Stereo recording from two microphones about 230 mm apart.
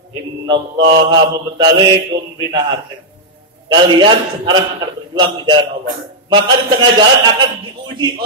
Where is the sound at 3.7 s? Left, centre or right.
Centre.